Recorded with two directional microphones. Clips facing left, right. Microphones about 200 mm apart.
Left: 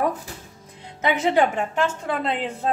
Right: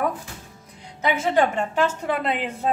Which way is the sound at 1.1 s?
15° left (ahead or behind).